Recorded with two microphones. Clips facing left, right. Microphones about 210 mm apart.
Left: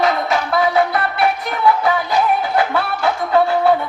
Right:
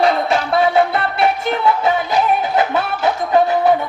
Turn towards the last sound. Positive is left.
turn(degrees=-20)  # may be behind; listen again after turning